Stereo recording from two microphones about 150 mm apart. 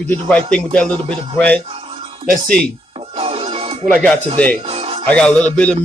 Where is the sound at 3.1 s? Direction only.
40° right (ahead or behind).